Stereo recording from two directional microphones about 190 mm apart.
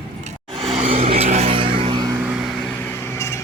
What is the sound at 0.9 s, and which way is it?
Vehicle, 30° right (ahead or behind).